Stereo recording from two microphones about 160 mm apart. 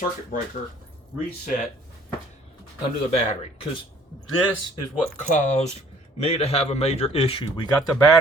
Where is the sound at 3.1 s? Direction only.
40° left (ahead or behind).